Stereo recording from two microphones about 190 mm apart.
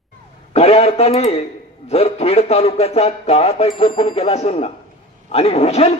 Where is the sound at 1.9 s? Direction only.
30° left (ahead or behind).